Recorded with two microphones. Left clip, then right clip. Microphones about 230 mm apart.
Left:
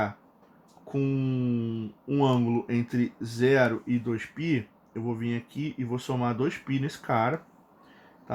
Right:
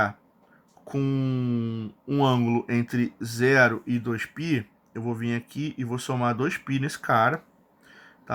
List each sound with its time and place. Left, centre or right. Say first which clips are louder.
0.9 s speech: right 1 dB; right